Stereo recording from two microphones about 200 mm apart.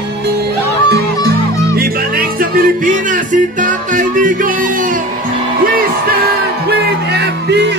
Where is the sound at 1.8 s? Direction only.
45° right (ahead or behind).